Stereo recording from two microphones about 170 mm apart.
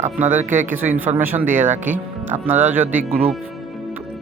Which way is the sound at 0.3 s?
45° right (ahead or behind).